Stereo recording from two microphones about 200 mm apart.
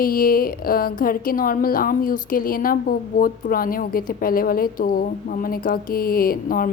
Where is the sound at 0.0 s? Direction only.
45° left (ahead or behind).